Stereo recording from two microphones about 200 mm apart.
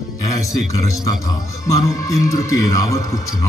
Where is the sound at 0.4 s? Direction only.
15° left (ahead or behind).